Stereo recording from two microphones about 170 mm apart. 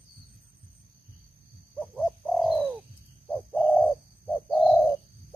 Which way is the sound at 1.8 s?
Centre (ahead or behind).